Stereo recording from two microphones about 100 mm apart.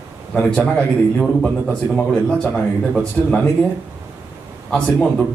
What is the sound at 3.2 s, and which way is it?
Speech, 20° left (ahead or behind).